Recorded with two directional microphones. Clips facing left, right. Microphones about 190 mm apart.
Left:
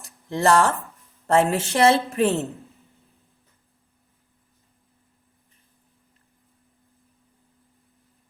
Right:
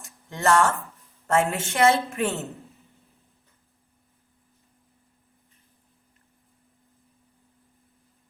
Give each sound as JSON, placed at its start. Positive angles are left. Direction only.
{"t": 0.3, "sound": "a woman's voice", "side_deg": 35}
{"t": 2.3, "sound": "a woman's voice", "side_deg": 0}